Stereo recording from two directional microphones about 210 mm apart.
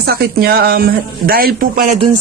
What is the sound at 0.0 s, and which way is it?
Speech, 45° right (ahead or behind).